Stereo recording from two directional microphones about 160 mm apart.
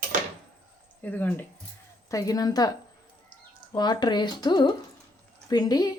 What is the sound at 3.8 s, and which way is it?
A woman's voice, 25° left (ahead or behind).